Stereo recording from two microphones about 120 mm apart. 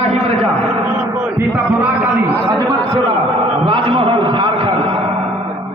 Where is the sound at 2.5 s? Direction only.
35° right (ahead or behind).